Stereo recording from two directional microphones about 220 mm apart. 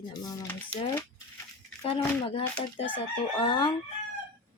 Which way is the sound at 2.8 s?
20° left (ahead or behind).